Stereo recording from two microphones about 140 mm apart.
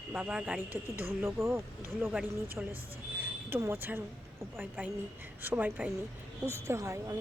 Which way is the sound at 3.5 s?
15° right (ahead or behind).